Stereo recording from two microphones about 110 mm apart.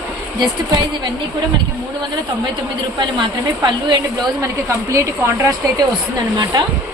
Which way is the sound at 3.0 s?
45° right (ahead or behind).